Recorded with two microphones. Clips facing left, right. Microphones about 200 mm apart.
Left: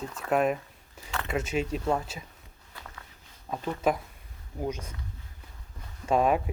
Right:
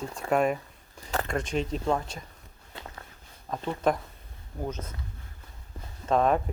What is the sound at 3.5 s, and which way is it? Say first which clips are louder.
Speech: right 1 dB; 10° left (ahead or behind).